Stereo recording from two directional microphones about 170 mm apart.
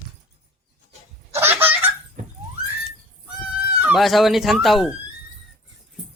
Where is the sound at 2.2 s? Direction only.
50° right (ahead or behind).